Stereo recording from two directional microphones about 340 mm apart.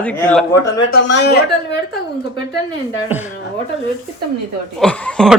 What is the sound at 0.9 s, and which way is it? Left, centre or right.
Speech, left.